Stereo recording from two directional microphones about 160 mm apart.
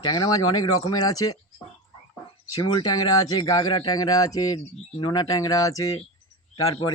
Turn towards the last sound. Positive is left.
turn(degrees=25)  # may be behind; listen again after turning